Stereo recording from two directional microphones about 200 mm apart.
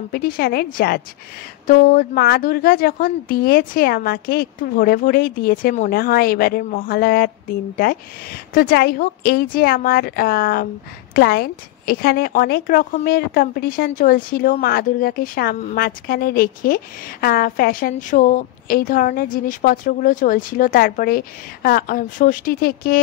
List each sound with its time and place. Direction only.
0.1 s a woman's voice: 50° left (ahead or behind)